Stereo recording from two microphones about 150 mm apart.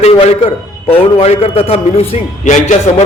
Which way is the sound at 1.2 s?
40° left (ahead or behind).